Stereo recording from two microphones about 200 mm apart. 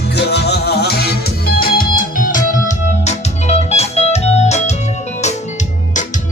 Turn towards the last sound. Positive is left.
turn(degrees=35)  # may be behind; listen again after turning